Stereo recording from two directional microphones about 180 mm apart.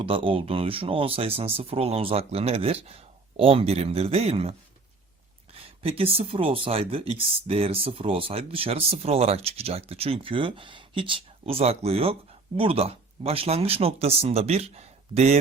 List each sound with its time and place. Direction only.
0.0 s speech: 30° right (ahead or behind)
5.8 s speech: 30° right (ahead or behind)